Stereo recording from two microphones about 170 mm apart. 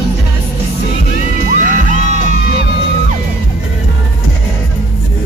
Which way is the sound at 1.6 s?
50° right (ahead or behind).